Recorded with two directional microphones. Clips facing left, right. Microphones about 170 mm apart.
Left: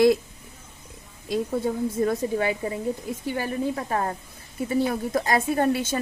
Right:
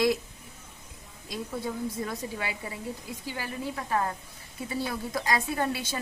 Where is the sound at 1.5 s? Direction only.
45° left (ahead or behind).